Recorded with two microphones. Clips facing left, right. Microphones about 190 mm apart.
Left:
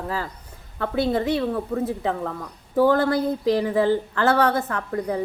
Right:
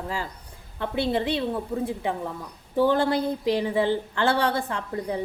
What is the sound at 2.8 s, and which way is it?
Speech, 25° right (ahead or behind).